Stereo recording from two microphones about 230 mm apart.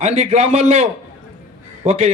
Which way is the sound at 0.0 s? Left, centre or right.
Right.